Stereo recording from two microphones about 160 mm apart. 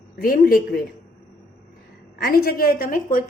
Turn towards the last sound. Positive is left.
turn(degrees=60)  # may be behind; listen again after turning